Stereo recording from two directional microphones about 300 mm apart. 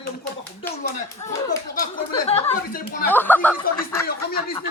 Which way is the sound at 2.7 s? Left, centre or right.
Left.